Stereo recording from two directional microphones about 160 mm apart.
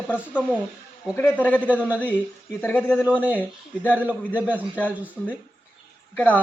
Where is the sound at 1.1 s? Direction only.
10° left (ahead or behind).